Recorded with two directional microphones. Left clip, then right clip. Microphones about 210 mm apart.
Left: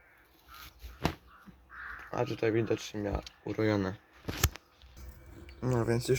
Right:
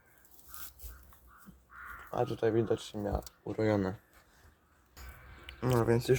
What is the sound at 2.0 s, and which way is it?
Speech, 10° left (ahead or behind).